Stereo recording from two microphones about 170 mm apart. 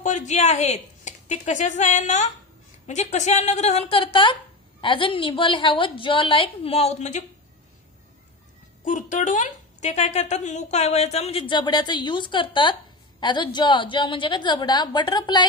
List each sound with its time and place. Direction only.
0.0 s a woman's voice: 45° left (ahead or behind)
8.8 s a woman's voice: 50° left (ahead or behind); by 15.4 s 25° left (ahead or behind)